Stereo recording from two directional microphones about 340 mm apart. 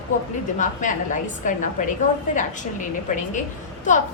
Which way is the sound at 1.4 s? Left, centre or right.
Left.